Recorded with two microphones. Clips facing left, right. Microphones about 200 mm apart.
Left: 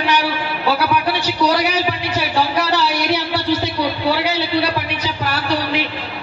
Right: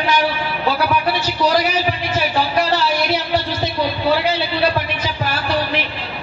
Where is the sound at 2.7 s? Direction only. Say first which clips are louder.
Even; 70° left (ahead or behind).